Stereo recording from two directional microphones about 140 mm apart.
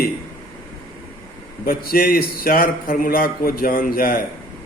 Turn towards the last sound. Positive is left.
turn(degrees=90)